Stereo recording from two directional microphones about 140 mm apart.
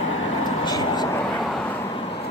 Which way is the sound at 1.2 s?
5° left (ahead or behind).